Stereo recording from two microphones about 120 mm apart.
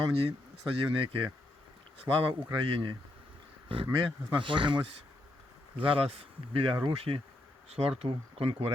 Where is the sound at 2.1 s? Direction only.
30° right (ahead or behind).